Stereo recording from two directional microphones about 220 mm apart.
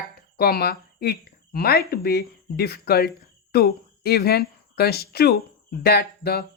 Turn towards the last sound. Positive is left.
turn(degrees=45)  # may be behind; listen again after turning